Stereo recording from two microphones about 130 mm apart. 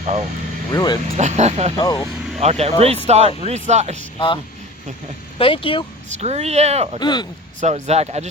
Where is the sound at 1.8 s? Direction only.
30° left (ahead or behind).